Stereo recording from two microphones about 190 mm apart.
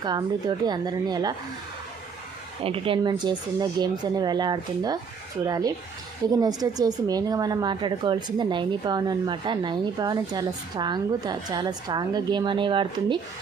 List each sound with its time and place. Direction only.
0.0 s a woman's voice: 20° right (ahead or behind)
2.6 s a woman's voice: 30° right (ahead or behind)